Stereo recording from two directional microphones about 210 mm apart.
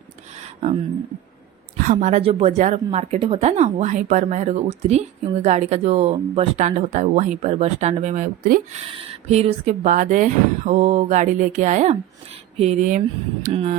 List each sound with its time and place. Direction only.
1.8 s a woman's voice: 35° right (ahead or behind)